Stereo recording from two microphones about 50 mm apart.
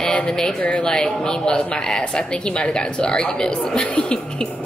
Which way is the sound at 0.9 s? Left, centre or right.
Centre.